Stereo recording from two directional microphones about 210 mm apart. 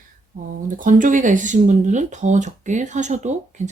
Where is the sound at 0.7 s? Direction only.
40° right (ahead or behind).